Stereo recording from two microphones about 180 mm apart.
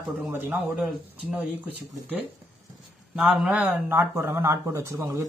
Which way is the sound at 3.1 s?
5° right (ahead or behind).